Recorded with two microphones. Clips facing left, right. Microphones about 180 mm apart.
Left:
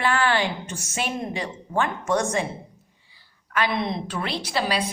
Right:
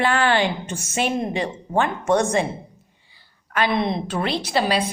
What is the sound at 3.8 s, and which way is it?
Speech, 25° right (ahead or behind).